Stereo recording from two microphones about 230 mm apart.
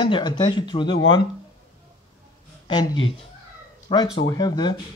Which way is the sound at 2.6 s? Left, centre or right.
Centre.